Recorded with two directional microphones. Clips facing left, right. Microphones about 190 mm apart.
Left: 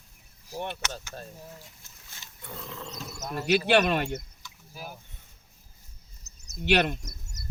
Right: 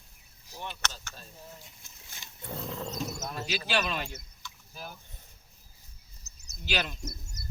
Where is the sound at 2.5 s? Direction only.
30° right (ahead or behind).